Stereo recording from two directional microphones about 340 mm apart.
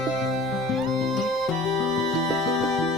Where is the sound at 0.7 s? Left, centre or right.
Centre.